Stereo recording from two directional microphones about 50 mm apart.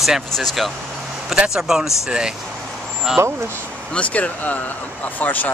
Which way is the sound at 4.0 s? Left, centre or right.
Left.